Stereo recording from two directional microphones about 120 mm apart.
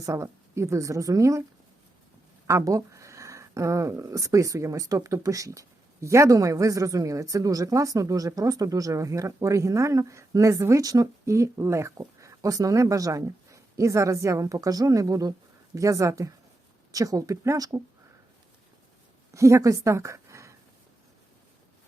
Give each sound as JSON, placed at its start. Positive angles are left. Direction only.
{"t": 0.0, "sound": "speech", "side_deg": -25}
{"t": 2.5, "sound": "speech", "side_deg": -25}
{"t": 19.3, "sound": "a woman's voice", "side_deg": -25}